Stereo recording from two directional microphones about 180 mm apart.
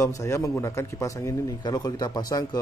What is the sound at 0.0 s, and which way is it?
Speech, 15° left (ahead or behind).